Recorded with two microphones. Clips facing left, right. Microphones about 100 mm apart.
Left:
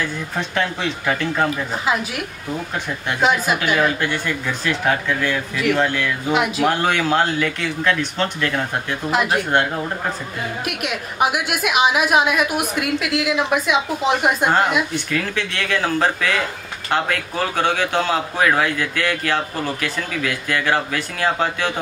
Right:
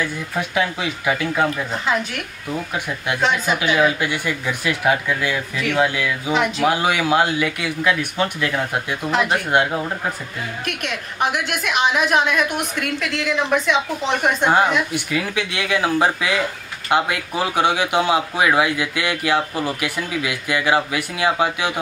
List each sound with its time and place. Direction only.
0.0 s a man's voice: 10° right (ahead or behind)
1.7 s a woman's voice: 5° left (ahead or behind)
2.7 s a man's voice: 10° right (ahead or behind)
3.2 s a woman's voice: 5° left (ahead or behind)
3.6 s a man's voice: 5° right (ahead or behind)
6.3 s speech: 5° left (ahead or behind)
6.7 s a man's voice: 10° right (ahead or behind)
9.1 s speech: 5° left (ahead or behind)
9.5 s a man's voice: 10° right (ahead or behind)
10.6 s a woman's voice: 10° left (ahead or behind)
15.0 s a man's voice: 10° right (ahead or behind)